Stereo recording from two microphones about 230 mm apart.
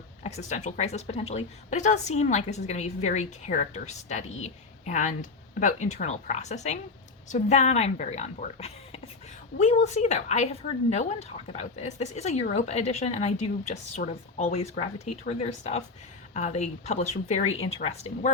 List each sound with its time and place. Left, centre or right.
0.2 s speech: left